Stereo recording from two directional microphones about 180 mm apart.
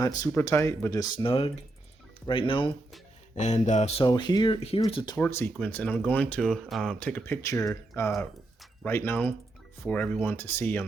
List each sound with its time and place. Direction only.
0.0 s speech: 20° left (ahead or behind)
3.3 s speech: 40° left (ahead or behind)
4.0 s speech: 25° left (ahead or behind)
5.2 s speech: 10° left (ahead or behind)